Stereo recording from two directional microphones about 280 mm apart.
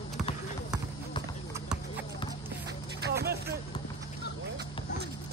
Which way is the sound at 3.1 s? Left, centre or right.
Right.